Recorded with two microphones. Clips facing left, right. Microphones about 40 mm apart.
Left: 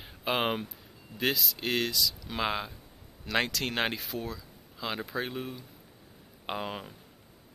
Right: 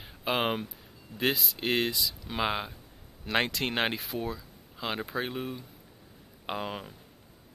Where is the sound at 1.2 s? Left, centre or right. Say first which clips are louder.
Right 1 dB; centre.